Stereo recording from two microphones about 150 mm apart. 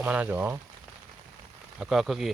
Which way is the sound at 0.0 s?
10° right (ahead or behind).